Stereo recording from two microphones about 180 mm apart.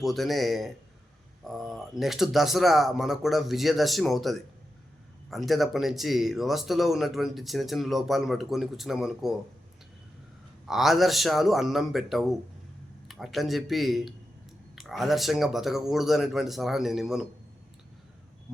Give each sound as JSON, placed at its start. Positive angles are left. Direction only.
{"t": 0.0, "sound": "speech", "side_deg": 0}
{"t": 10.7, "sound": "speech", "side_deg": 0}